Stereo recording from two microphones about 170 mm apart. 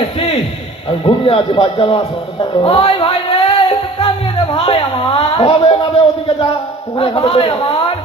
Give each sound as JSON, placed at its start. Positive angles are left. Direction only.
{"t": 0.9, "sound": "speech", "side_deg": 35}
{"t": 2.4, "sound": "music", "side_deg": 30}
{"t": 4.5, "sound": "a sound", "side_deg": 35}
{"t": 7.3, "sound": "speech", "side_deg": 35}